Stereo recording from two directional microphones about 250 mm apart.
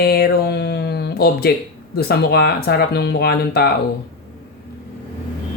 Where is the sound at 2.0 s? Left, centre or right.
Left.